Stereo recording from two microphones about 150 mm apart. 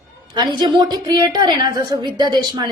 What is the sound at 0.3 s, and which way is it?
A woman's voice, 30° right (ahead or behind).